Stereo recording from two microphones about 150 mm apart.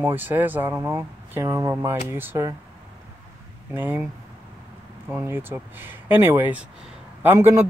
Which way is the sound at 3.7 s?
15° right (ahead or behind).